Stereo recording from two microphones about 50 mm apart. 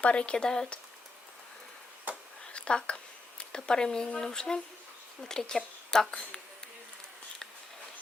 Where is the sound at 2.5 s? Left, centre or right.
Centre.